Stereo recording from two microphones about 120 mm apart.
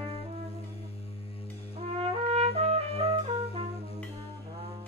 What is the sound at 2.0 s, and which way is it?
Trumpet, 55° right (ahead or behind).